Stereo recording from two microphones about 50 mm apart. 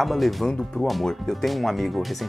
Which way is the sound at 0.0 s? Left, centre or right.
Centre.